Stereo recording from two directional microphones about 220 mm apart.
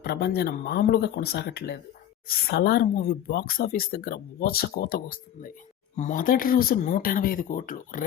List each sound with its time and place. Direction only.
0.0 s speech: 45° left (ahead or behind)